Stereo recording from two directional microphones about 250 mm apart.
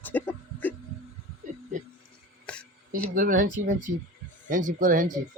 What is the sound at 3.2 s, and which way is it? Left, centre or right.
Speech, right.